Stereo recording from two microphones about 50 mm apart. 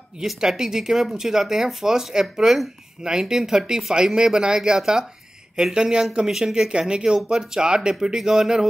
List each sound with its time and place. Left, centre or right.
0.4 s speech: centre